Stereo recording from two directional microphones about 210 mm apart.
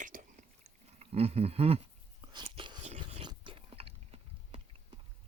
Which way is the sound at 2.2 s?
25° right (ahead or behind).